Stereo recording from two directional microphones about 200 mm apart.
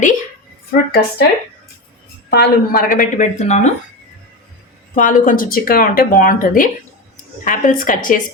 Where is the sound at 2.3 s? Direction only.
50° left (ahead or behind); by 3.7 s 35° left (ahead or behind).